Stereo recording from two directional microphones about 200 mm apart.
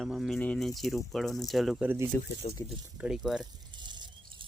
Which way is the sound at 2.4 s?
35° left (ahead or behind).